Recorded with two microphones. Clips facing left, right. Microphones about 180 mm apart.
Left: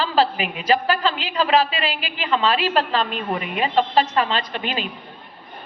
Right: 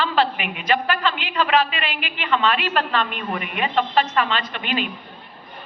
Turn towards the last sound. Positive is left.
turn(degrees=35)  # may be behind; listen again after turning